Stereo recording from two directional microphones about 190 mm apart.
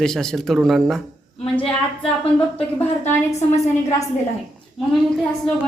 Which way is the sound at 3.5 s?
15° left (ahead or behind).